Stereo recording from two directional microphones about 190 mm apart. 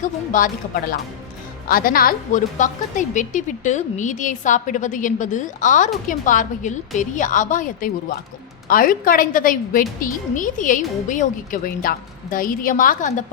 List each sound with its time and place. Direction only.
0.0 s a woman's voice: 45° left (ahead or behind)